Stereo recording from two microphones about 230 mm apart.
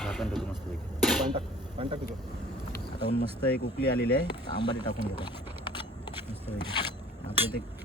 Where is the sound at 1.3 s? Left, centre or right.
Right.